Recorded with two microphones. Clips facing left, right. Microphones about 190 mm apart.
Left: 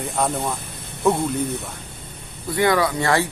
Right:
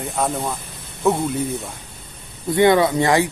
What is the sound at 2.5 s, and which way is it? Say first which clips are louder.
Speech: right 4 dB; 25° right (ahead or behind).